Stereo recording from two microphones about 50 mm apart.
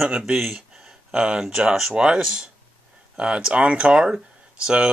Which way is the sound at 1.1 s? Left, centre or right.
Centre.